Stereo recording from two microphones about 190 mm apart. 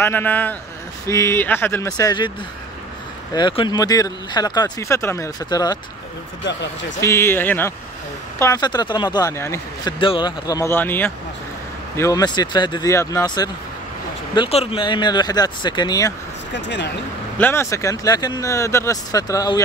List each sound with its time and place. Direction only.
0.0 s speech: 10° left (ahead or behind)
3.3 s speech: 25° left (ahead or behind)
7.0 s speech: 15° left (ahead or behind)
9.9 s speech: 25° left (ahead or behind)
16.5 s speech: 70° left (ahead or behind)
17.4 s speech: 10° left (ahead or behind)